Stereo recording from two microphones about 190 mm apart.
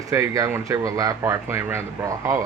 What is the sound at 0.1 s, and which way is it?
A man's voice, 15° right (ahead or behind).